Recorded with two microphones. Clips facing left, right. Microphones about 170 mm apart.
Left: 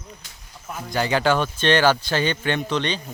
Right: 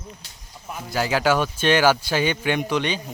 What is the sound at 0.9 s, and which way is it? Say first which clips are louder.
Speech: even; 5° right (ahead or behind).